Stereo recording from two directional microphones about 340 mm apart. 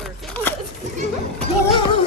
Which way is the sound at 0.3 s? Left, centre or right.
Centre.